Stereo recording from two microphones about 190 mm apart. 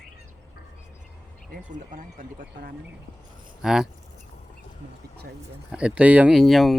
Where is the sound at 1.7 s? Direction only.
45° right (ahead or behind).